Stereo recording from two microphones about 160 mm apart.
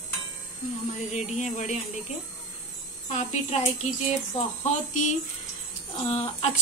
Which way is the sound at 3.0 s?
45° left (ahead or behind).